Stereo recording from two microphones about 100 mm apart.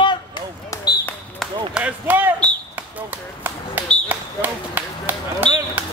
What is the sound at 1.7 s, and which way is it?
A man's voice, 15° right (ahead or behind).